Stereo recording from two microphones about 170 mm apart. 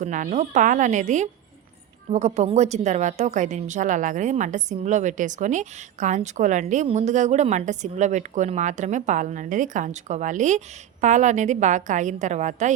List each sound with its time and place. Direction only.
0.0 s a woman's voice: 45° right (ahead or behind)